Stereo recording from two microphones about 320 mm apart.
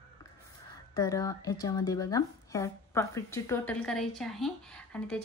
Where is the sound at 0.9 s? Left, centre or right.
Centre.